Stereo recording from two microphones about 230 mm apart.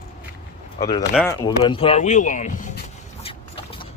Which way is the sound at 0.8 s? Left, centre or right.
Left.